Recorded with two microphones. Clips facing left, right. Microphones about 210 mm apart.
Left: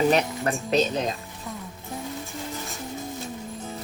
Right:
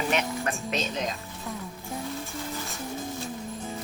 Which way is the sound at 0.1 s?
35° left (ahead or behind).